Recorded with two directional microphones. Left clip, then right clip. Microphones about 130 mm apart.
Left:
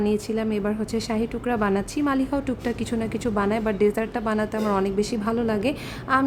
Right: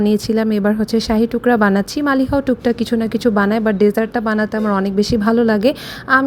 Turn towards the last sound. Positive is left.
turn(degrees=-50)  # may be behind; listen again after turning